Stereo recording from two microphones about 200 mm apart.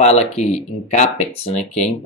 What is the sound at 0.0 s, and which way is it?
Speech, 30° left (ahead or behind).